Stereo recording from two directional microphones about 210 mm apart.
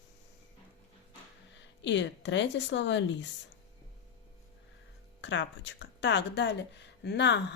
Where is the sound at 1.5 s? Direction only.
60° left (ahead or behind).